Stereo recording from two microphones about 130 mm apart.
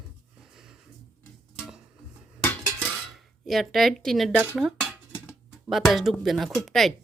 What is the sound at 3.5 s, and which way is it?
Speech, centre (ahead or behind).